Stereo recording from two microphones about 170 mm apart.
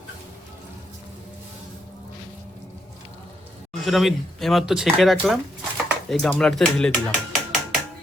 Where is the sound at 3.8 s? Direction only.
Centre (ahead or behind).